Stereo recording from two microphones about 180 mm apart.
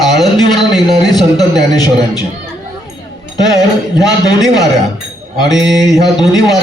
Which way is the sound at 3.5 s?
20° left (ahead or behind).